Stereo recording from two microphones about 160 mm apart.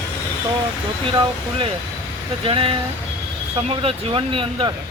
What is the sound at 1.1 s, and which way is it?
Speech, 35° right (ahead or behind).